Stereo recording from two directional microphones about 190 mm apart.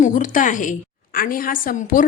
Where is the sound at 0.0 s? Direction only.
45° left (ahead or behind).